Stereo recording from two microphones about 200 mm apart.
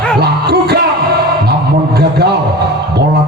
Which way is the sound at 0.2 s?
55° right (ahead or behind).